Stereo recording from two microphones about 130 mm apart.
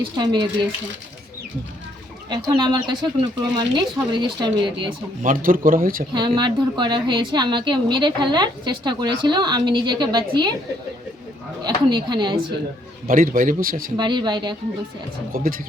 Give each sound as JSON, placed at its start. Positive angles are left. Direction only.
{"t": 0.0, "sound": "a woman's voice", "side_deg": -35}
{"t": 2.3, "sound": "a woman's voice", "side_deg": -35}
{"t": 5.2, "sound": "speech", "side_deg": -90}
{"t": 6.1, "sound": "a woman's voice", "side_deg": -35}
{"t": 11.6, "sound": "a woman's voice", "side_deg": -35}
{"t": 13.1, "sound": "speech", "side_deg": -90}
{"t": 13.9, "sound": "a woman's voice", "side_deg": -35}
{"t": 15.3, "sound": "speech", "side_deg": -90}